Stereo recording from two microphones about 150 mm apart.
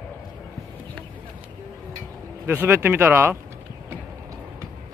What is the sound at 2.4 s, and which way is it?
Speech, 15° right (ahead or behind).